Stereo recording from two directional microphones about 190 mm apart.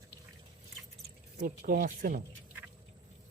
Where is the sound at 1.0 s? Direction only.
50° right (ahead or behind).